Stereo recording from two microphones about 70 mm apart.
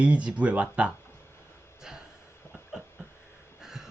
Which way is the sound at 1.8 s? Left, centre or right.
Centre.